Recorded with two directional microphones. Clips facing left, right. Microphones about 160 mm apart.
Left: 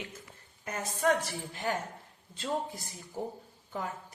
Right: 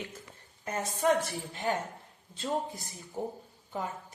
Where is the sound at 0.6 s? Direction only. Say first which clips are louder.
Right 1 dB; 25° right (ahead or behind).